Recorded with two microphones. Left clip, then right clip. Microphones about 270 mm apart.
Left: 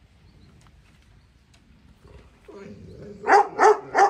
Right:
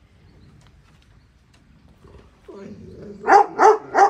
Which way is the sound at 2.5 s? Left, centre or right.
Right.